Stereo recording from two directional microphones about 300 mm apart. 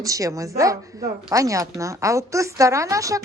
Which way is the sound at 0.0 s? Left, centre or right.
Centre.